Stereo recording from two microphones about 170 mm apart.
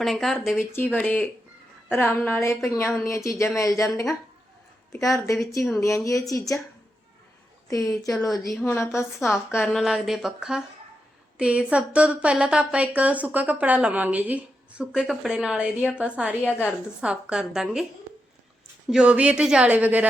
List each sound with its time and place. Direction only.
0.0 s speech: centre (ahead or behind)
0.7 s a woman's voice: 10° left (ahead or behind)
4.9 s speech: 20° left (ahead or behind)
7.7 s speech: 20° left (ahead or behind)
8.0 s speech: centre (ahead or behind)
8.6 s a woman's voice: 15° left (ahead or behind)
9.6 s speech: centre (ahead or behind)
16.4 s a woman's voice: 10° left (ahead or behind)
17.0 s speech: 5° right (ahead or behind)
18.9 s speech: 5° right (ahead or behind)